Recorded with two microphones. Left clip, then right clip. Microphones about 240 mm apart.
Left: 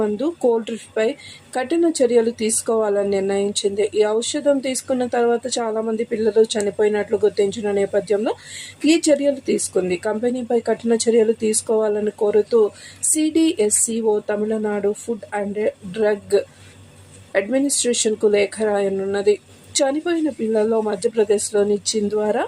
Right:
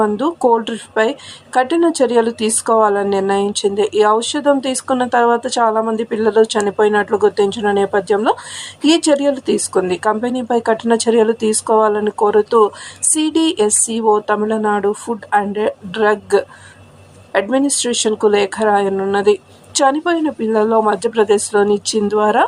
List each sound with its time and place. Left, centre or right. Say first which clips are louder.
0.0 s speech: right 5 dB; centre